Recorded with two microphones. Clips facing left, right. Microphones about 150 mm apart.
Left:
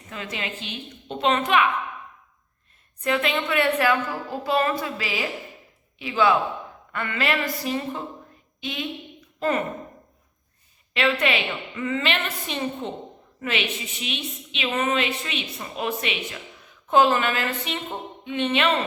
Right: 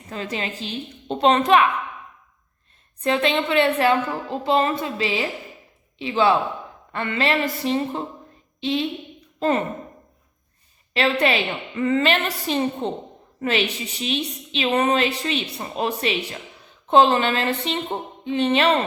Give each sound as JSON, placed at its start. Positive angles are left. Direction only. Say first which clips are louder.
{"t": 0.1, "sound": "a woman's voice", "louder": "right 4 dB", "side_deg": -35}
{"t": 3.0, "sound": "a woman's voice", "louder": "right 3 dB", "side_deg": -30}
{"t": 10.9, "sound": "a woman's voice", "louder": "right 3 dB", "side_deg": -35}